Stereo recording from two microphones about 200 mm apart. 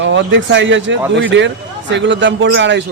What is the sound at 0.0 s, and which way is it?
Speech, 65° right (ahead or behind).